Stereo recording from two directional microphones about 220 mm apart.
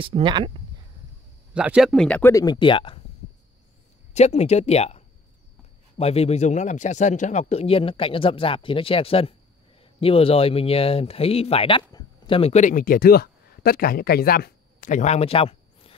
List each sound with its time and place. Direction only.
0.0 s speech: 20° right (ahead or behind)
1.5 s speech: 5° right (ahead or behind); by 3.0 s 25° left (ahead or behind)
4.1 s speech: 30° left (ahead or behind)